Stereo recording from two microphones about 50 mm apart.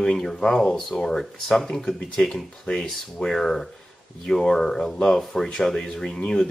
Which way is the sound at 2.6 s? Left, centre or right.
Centre.